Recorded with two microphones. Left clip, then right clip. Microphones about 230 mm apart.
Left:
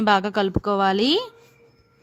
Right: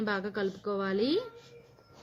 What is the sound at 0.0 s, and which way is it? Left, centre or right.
A woman's voice, left.